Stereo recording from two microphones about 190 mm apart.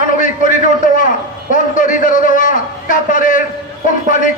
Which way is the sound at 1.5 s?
45° left (ahead or behind).